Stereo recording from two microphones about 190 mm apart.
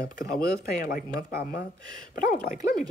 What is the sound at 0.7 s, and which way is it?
Speech, 50° left (ahead or behind).